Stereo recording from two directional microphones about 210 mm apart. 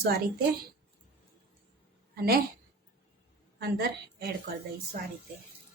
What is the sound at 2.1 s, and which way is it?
Speech, 45° right (ahead or behind).